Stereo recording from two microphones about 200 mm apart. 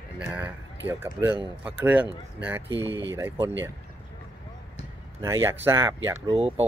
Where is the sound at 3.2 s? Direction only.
15° right (ahead or behind).